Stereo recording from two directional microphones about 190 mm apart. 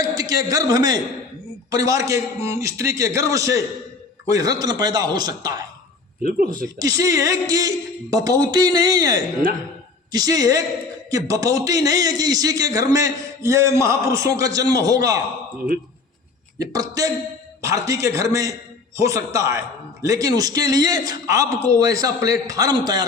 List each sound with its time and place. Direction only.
0.0 s a man's voice: 20° right (ahead or behind)
6.2 s speech: 50° right (ahead or behind)
6.7 s a man's voice: 20° right (ahead or behind)
16.6 s a man's voice: 20° right (ahead or behind)